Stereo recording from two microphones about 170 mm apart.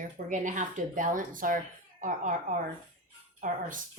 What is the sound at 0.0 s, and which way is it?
Speech, 50° right (ahead or behind).